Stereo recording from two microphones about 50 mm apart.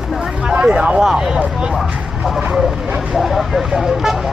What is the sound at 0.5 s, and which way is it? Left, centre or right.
Speech, centre.